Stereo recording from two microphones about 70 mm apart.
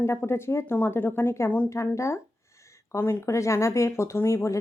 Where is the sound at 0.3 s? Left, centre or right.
Left.